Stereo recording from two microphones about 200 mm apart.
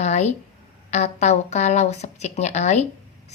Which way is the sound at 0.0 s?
35° left (ahead or behind).